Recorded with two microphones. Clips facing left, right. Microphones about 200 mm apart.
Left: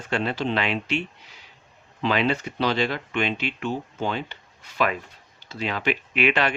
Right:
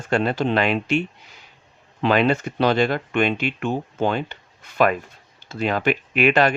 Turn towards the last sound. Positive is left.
turn(degrees=-45)  # may be behind; listen again after turning